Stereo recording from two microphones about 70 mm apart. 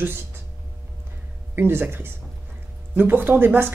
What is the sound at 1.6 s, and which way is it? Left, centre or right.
Speech, right.